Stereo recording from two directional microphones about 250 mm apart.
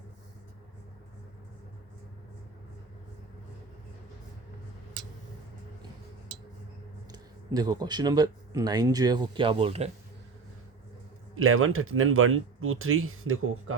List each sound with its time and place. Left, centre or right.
7.1 s speech: centre
11.3 s speech: right